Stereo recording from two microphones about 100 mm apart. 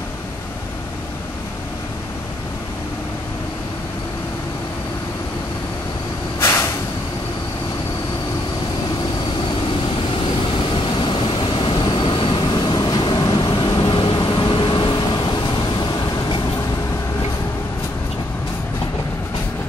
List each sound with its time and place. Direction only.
6.4 s vehicle: 25° left (ahead or behind)
10.1 s vehicle: 60° left (ahead or behind)